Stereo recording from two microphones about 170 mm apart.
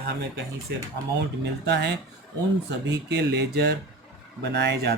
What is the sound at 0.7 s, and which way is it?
Speech, 80° right.